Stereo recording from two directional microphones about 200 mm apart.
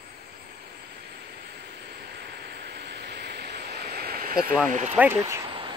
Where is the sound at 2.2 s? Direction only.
55° right (ahead or behind).